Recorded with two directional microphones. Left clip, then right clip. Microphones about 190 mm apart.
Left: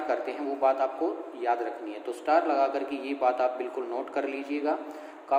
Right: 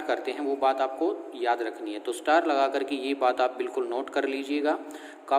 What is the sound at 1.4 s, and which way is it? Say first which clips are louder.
Speech: right 1 dB; 45° right (ahead or behind).